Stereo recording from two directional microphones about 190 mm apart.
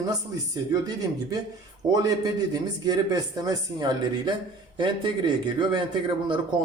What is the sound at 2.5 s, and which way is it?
Speech, 20° right (ahead or behind).